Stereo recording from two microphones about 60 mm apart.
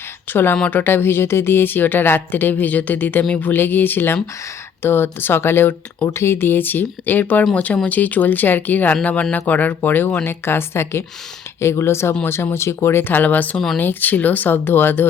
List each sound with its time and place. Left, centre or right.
0.3 s a woman's voice: left